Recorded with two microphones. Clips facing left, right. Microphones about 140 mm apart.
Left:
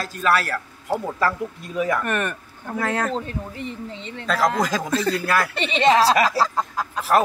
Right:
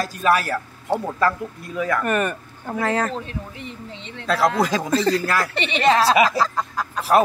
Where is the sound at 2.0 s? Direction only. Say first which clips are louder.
Right 3 dB; centre (ahead or behind).